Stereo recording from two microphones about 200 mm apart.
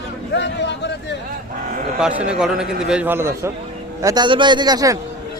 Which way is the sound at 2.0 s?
5° right (ahead or behind).